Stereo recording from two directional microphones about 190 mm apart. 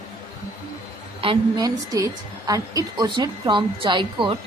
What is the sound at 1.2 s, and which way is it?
Speech, 30° right (ahead or behind).